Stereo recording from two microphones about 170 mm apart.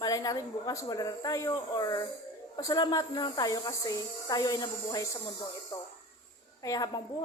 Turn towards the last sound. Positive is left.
turn(degrees=20)  # may be behind; listen again after turning